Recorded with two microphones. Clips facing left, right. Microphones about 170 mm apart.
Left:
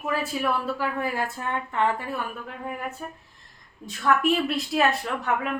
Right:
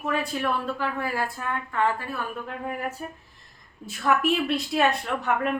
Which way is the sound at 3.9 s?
5° right (ahead or behind).